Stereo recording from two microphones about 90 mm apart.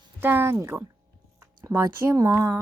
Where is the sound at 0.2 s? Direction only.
25° right (ahead or behind).